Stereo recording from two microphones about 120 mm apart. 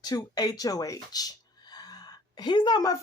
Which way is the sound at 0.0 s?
35° left (ahead or behind).